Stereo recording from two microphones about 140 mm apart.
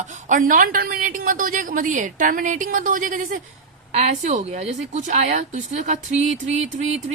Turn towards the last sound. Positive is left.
turn(degrees=-50)  # may be behind; listen again after turning